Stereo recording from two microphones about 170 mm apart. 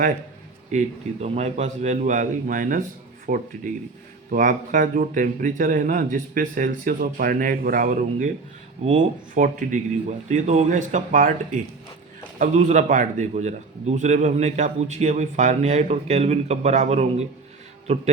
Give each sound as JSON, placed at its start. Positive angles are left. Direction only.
{"t": 0.7, "sound": "a man's voice", "side_deg": -40}